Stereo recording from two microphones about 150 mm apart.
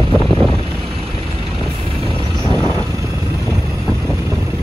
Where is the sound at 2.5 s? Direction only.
20° left (ahead or behind).